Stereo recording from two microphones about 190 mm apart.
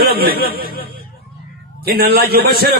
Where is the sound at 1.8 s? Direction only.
55° right (ahead or behind).